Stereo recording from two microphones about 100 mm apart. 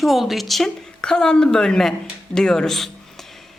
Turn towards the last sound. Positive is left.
turn(degrees=5)  # may be behind; listen again after turning